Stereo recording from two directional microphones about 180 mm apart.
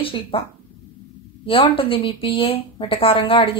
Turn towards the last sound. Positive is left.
turn(degrees=30)  # may be behind; listen again after turning